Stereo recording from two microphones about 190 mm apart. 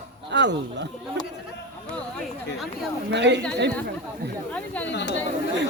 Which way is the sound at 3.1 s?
65° right (ahead or behind).